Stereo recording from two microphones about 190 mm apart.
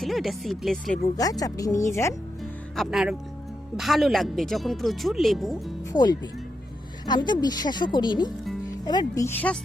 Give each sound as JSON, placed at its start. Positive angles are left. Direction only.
{"t": 0.0, "sound": "speech", "side_deg": 0}
{"t": 1.1, "sound": "speech", "side_deg": 20}
{"t": 2.4, "sound": "music", "side_deg": 0}
{"t": 3.8, "sound": "speech", "side_deg": 0}
{"t": 5.9, "sound": "a woman's voice", "side_deg": 20}